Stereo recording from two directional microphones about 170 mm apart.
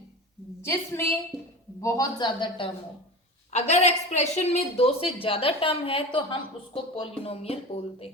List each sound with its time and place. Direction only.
0.6 s a woman's voice: 15° left (ahead or behind)
3.5 s a woman's voice: 40° left (ahead or behind)